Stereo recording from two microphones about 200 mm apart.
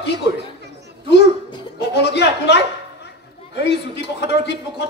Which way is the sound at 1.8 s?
60° left (ahead or behind).